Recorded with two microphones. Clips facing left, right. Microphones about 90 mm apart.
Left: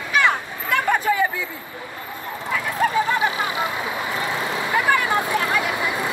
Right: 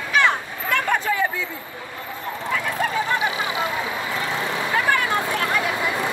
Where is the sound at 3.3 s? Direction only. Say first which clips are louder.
Left 1 dB; 20° right (ahead or behind).